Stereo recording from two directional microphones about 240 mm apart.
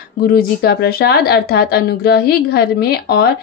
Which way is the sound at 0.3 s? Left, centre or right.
Left.